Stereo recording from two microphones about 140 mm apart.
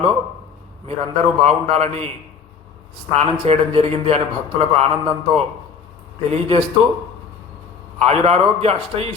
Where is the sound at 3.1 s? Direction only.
45° right (ahead or behind).